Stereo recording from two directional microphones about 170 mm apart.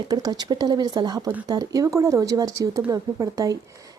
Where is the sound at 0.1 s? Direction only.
20° right (ahead or behind).